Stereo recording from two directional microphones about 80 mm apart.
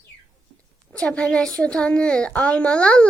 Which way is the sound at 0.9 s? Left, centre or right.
Centre.